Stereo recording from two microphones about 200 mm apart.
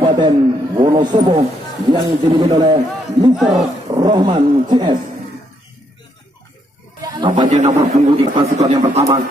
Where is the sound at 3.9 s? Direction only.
20° right (ahead or behind).